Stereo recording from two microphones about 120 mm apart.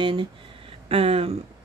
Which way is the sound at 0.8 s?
55° right (ahead or behind).